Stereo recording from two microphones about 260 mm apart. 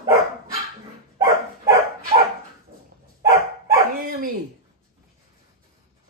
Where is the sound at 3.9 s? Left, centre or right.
Right.